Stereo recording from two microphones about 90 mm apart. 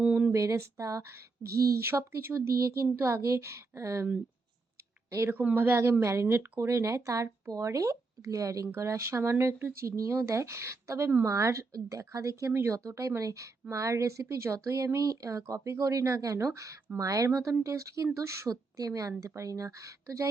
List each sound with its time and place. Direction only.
0.0 s a sound: 15° right (ahead or behind)
0.3 s speech: 35° right (ahead or behind)
1.8 s speech: 25° right (ahead or behind)
5.3 s speech: 20° right (ahead or behind); by 12.5 s 35° right (ahead or behind)
12.5 s speech: 25° right (ahead or behind)
12.7 s speech: 35° right (ahead or behind)